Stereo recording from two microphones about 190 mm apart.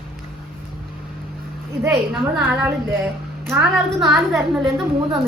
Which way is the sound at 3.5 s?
Centre (ahead or behind).